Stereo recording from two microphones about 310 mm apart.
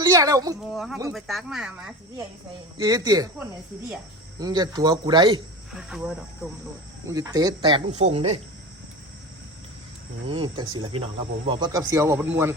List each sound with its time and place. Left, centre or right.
0.0 s speech: centre
0.7 s speech: centre
4.4 s speech: centre
5.7 s speech: centre
10.2 s speech: centre